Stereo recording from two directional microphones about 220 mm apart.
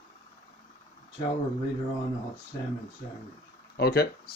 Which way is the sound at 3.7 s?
45° left (ahead or behind).